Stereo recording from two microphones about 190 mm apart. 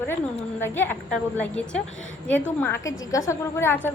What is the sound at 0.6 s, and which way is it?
A woman's voice, 10° left (ahead or behind).